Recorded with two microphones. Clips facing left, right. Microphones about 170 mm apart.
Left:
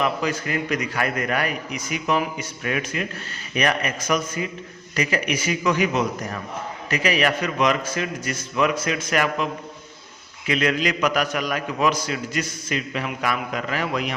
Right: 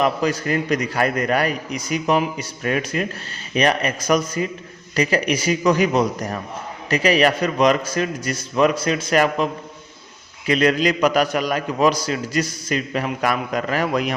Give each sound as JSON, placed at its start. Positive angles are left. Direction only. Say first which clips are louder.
{"t": 0.0, "sound": "a man's voice", "louder": "right 4 dB", "side_deg": -40}